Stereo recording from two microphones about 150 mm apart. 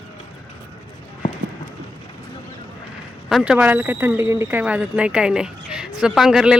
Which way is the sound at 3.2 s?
5° right (ahead or behind).